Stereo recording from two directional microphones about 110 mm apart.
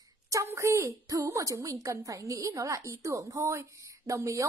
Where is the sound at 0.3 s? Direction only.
25° right (ahead or behind).